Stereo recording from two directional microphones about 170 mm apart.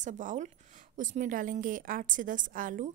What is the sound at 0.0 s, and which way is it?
A woman's voice, 45° right (ahead or behind).